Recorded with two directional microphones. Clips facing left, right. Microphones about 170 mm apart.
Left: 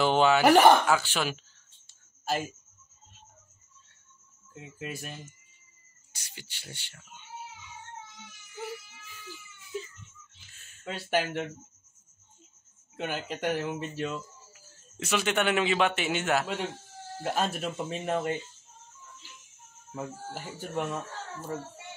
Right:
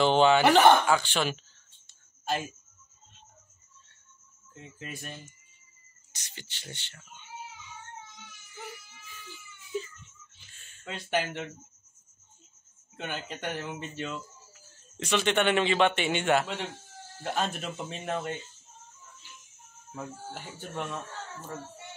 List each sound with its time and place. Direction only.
0.0 s speech: 5° left (ahead or behind)
4.6 s speech: 5° left (ahead or behind)
6.1 s speech: 10° left (ahead or behind)
8.6 s baby cry: 10° left (ahead or behind)
10.6 s speech: 5° left (ahead or behind)
12.9 s a man's voice: 5° left (ahead or behind)
19.9 s speech: 10° left (ahead or behind)